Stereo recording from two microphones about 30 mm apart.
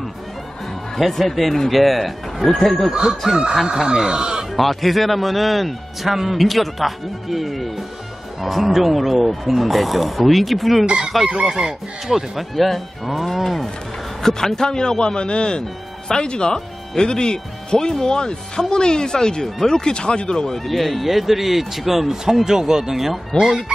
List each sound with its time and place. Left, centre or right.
0.9 s speech: centre
2.9 s speech: right
4.6 s speech: centre
11.2 s speech: right
12.1 s speech: centre
14.2 s a man's voice: centre; by 20.4 s left
20.4 s speech: centre
22.1 s speech: centre
23.3 s speech: left